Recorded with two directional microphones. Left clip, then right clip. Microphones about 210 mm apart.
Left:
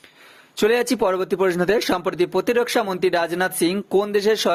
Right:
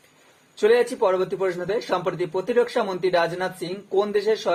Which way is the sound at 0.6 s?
50° left (ahead or behind).